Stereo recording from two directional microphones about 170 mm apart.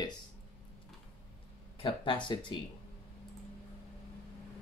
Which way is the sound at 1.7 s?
30° left (ahead or behind).